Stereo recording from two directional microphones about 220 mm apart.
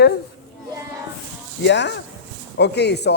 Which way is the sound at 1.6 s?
50° left (ahead or behind).